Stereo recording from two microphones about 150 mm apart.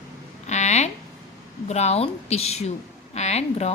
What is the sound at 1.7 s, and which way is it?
A woman's voice, 45° left (ahead or behind).